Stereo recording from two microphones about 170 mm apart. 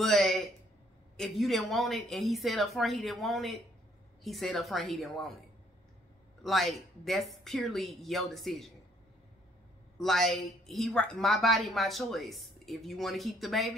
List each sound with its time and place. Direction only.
0.0 s a sound: centre (ahead or behind)
1.1 s a woman's voice: centre (ahead or behind)
6.4 s a woman's voice: centre (ahead or behind)
9.9 s a woman's voice: centre (ahead or behind)